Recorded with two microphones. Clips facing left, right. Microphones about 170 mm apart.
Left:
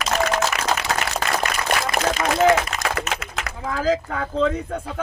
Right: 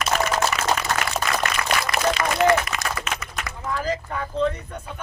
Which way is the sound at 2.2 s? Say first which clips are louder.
Left 2 dB; 20° left (ahead or behind).